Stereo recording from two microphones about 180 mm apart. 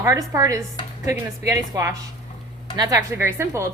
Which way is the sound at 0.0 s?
15° right (ahead or behind).